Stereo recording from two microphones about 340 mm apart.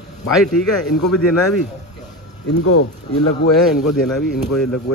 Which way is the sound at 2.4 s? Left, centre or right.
Left.